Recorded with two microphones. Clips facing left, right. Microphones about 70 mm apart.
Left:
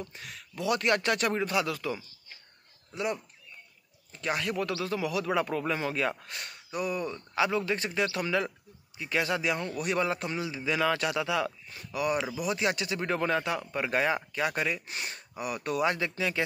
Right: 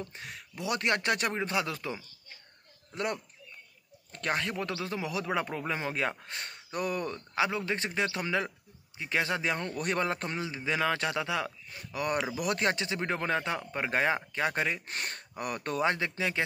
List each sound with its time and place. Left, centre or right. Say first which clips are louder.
0.0 s speech: even; right
2.9 s speech: left 1 dB; right
4.3 s speech: left 2 dB; right
6.7 s speech: left 1 dB; right
7.3 s a man's voice: left 2 dB; right
12.4 s speech: even; right
12.7 s a man's voice: left 2 dB; right
14.9 s a man's voice: right 1 dB; right